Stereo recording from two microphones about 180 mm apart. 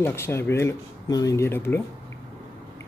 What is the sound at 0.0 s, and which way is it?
Speech, 15° left (ahead or behind).